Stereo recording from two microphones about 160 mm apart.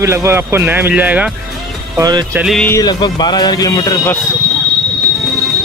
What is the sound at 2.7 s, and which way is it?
A man's voice, 25° left (ahead or behind).